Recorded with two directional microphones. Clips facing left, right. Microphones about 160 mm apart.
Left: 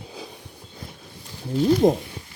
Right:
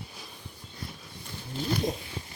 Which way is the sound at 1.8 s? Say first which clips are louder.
Left 13 dB; 90° left.